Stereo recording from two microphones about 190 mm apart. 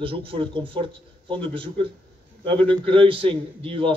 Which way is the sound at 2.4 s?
30° right (ahead or behind).